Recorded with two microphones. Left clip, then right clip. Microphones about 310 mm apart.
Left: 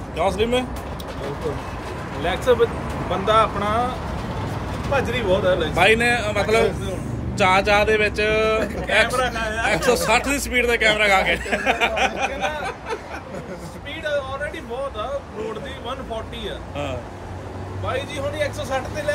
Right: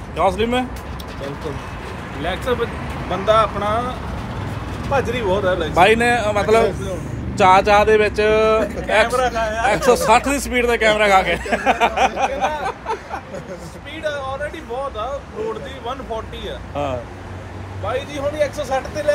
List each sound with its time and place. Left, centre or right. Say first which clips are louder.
0.1 s speech: right 3 dB; right
2.2 s speech: left 3 dB; centre
4.9 s speech: right 2 dB; centre
12.6 s a sound: right 4 dB; centre
14.0 s speech: right 1 dB; centre
16.4 s speech: right 6 dB; centre